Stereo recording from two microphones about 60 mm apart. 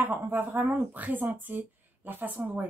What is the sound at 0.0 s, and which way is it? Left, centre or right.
A woman's voice, right.